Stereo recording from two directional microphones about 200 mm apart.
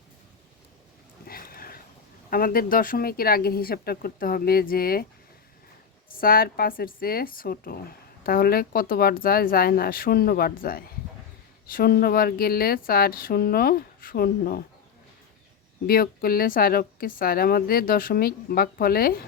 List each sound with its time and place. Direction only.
1.3 s a sound: 45° left (ahead or behind)
2.3 s a woman's voice: 45° left (ahead or behind)
6.1 s a woman's voice: 45° left (ahead or behind)
15.9 s a woman's voice: 45° left (ahead or behind)